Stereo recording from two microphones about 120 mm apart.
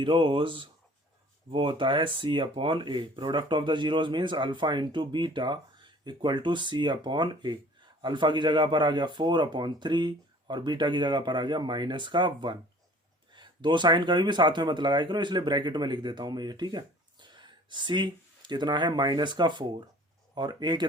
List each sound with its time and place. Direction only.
0.0 s speech: 45° right (ahead or behind)